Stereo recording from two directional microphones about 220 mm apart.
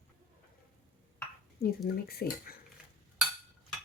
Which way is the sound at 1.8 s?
45° left (ahead or behind).